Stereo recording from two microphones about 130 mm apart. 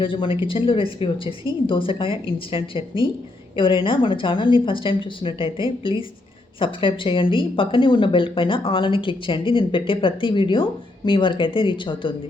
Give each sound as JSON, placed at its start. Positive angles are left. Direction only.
{"t": 0.0, "sound": "a woman's voice", "side_deg": 40}